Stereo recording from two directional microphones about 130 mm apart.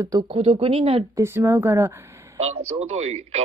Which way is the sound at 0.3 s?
50° right (ahead or behind).